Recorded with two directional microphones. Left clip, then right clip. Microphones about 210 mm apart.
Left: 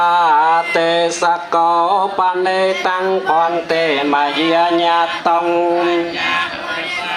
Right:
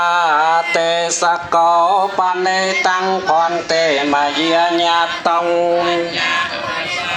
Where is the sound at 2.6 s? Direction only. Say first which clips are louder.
Even; 40° right (ahead or behind).